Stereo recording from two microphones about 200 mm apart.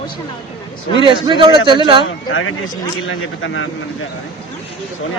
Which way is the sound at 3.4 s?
75° left (ahead or behind).